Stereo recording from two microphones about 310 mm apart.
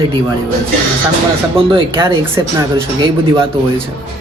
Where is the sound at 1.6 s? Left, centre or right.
Centre.